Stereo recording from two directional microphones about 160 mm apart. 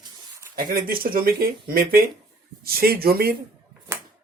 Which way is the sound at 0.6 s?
70° right (ahead or behind).